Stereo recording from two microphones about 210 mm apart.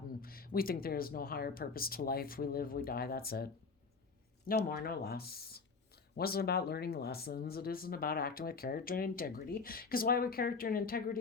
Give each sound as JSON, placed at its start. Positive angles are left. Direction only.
{"t": 0.2, "sound": "speech", "side_deg": 45}